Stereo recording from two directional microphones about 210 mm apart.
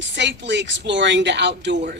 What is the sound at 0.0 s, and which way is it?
Speech, 55° right (ahead or behind).